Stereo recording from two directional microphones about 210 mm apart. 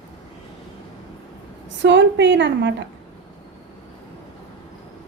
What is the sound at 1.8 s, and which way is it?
A woman's voice, 60° right (ahead or behind).